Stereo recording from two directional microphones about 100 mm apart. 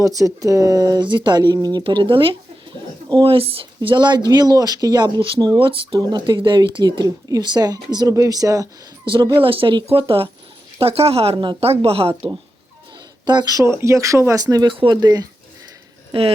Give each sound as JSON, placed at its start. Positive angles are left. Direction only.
{"t": 0.0, "sound": "speech", "side_deg": -35}
{"t": 1.0, "sound": "speech", "side_deg": -50}
{"t": 1.8, "sound": "speech", "side_deg": -55}
{"t": 3.2, "sound": "speech", "side_deg": -70}
{"t": 3.8, "sound": "speech", "side_deg": -50}
{"t": 5.5, "sound": "speech", "side_deg": -60}
{"t": 6.0, "sound": "speech", "side_deg": -45}
{"t": 9.3, "sound": "speech", "side_deg": -60}
{"t": 10.8, "sound": "speech", "side_deg": -75}
{"t": 11.3, "sound": "speech", "side_deg": -65}
{"t": 13.2, "sound": "speech", "side_deg": -45}